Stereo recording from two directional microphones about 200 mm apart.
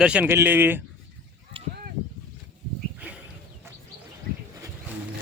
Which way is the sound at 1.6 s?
25° right (ahead or behind).